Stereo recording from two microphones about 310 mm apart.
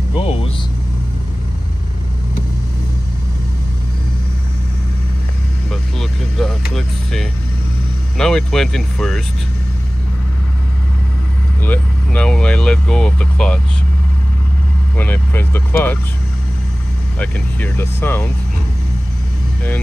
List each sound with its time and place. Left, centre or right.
0.1 s speech: centre
5.7 s speech: centre
11.6 s speech: centre
15.0 s speech: centre
17.2 s speech: centre